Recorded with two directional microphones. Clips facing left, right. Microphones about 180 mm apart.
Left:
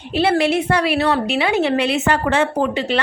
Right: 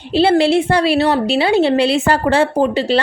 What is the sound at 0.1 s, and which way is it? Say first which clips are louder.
A woman's voice: right 4 dB; 30° right (ahead or behind).